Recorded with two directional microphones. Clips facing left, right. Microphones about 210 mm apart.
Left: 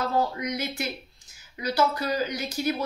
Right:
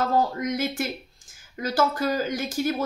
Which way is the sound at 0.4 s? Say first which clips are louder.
Right 4 dB; 50° right (ahead or behind).